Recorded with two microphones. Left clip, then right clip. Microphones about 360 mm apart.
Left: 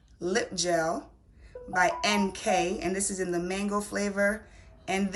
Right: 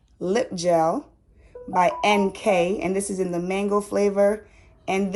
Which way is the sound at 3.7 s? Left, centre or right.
Right.